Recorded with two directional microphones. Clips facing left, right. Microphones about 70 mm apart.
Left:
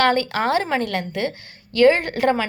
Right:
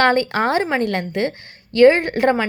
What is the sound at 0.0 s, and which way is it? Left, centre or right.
A woman's voice, right.